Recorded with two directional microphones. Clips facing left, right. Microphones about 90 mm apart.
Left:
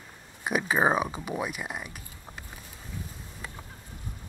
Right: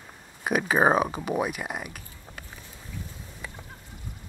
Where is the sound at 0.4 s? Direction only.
20° right (ahead or behind).